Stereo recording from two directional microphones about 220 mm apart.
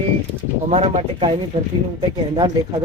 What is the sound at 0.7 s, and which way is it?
Speech, 30° right (ahead or behind).